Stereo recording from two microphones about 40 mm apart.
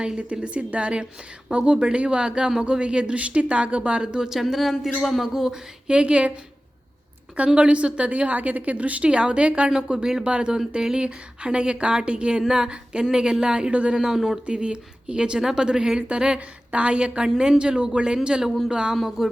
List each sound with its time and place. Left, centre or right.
0.2 s a woman's voice: right
4.4 s speech: centre
5.2 s speech: centre
5.9 s a woman's voice: right
7.3 s a woman's voice: right
9.6 s a woman's voice: centre
14.4 s a woman's voice: right
18.9 s speech: centre